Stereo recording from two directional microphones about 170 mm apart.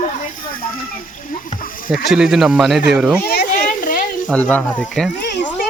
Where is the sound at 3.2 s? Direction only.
70° left (ahead or behind); by 4.2 s 50° left (ahead or behind).